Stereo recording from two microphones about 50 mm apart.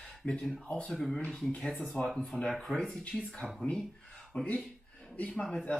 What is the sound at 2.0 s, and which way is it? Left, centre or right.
Speech, left.